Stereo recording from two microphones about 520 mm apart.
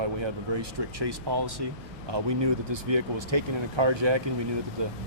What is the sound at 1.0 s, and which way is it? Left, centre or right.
Speech, right.